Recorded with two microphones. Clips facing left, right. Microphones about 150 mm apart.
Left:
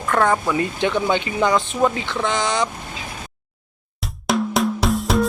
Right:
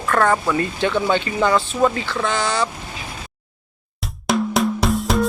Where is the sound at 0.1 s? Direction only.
15° left (ahead or behind).